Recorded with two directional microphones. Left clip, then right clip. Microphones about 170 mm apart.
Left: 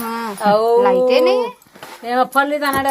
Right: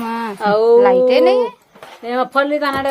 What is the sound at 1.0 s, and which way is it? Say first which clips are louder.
Speech: right 2 dB; 15° right (ahead or behind).